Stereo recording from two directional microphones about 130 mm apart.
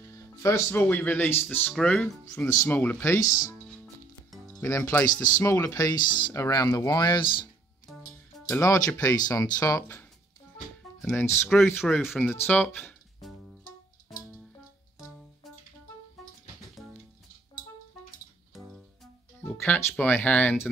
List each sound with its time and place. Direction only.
0.1 s speech: 20° left (ahead or behind)
3.3 s speech: 25° left (ahead or behind)
3.6 s music: centre (ahead or behind)
4.6 s speech: 20° left (ahead or behind); by 6.3 s 35° left (ahead or behind)
6.3 s speech: 25° left (ahead or behind)
8.5 s speech: 25° left (ahead or behind)
11.1 s speech: 20° left (ahead or behind)
11.4 s speech: 5° left (ahead or behind)
12.3 s speech: 10° left (ahead or behind)
16.2 s music: centre (ahead or behind)
18.5 s music: centre (ahead or behind)
19.9 s speech: 15° left (ahead or behind)